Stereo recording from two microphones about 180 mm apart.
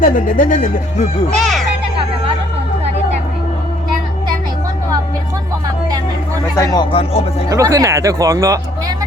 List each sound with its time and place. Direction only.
0.0 s speech: 50° left (ahead or behind)
1.3 s a child's voice: centre (ahead or behind)
6.6 s speech: 20° left (ahead or behind)
6.9 s speech: 35° left (ahead or behind)
7.5 s speech: 15° right (ahead or behind)